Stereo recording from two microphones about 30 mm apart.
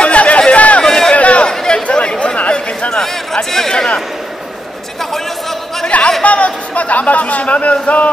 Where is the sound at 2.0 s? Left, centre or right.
Left.